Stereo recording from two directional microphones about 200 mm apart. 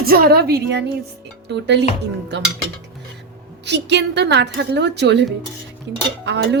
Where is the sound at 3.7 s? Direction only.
60° right (ahead or behind).